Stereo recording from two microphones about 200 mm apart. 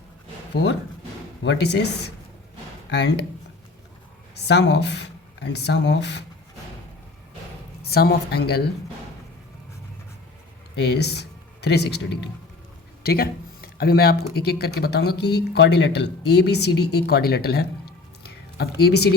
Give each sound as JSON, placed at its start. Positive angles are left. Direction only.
{"t": 0.5, "sound": "speech", "side_deg": 60}
{"t": 4.4, "sound": "speech", "side_deg": 60}
{"t": 7.8, "sound": "a woman's voice", "side_deg": 50}
{"t": 10.8, "sound": "speech", "side_deg": 55}